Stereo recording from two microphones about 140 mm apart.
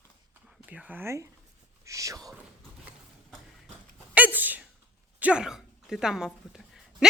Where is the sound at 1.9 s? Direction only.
25° right (ahead or behind).